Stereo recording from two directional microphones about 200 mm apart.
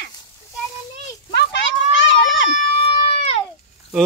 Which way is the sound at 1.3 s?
60° left (ahead or behind).